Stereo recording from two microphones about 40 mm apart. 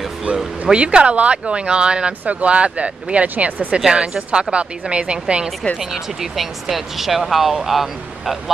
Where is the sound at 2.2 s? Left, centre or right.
Right.